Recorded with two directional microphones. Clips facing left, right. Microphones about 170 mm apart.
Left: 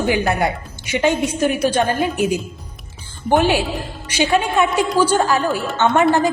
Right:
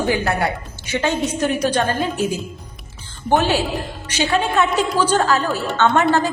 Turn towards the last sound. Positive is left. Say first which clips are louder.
# even
turn(degrees=20)  # may be behind; listen again after turning